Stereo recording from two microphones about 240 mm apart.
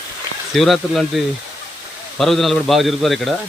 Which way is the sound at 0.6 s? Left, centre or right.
Centre.